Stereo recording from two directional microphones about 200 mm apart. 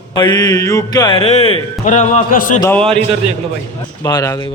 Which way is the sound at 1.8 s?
40° left (ahead or behind).